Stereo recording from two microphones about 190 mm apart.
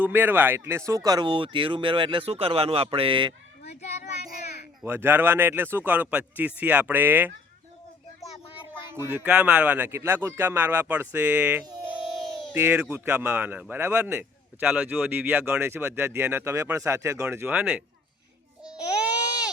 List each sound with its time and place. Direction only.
0.0 s speech: 10° right (ahead or behind); by 3.3 s 25° right (ahead or behind)
4.8 s speech: 10° right (ahead or behind)
8.7 s speech: 10° right (ahead or behind)
18.6 s babbling: 5° right (ahead or behind)